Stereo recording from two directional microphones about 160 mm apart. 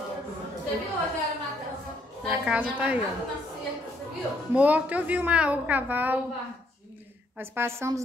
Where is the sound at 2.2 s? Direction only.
5° right (ahead or behind).